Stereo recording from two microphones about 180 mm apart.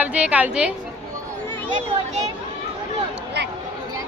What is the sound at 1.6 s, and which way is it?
Speech, 35° right (ahead or behind).